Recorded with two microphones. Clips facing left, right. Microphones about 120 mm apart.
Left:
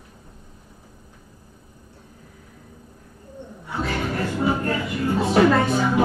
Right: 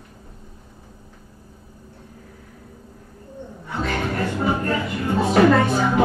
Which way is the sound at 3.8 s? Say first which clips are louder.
Right 1 dB; centre (ahead or behind).